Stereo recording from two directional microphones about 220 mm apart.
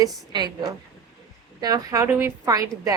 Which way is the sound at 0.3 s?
20° right (ahead or behind).